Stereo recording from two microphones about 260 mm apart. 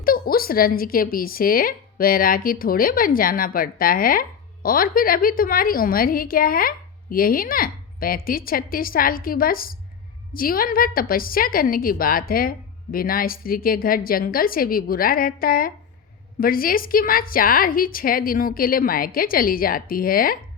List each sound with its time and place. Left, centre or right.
0.0 s speech: left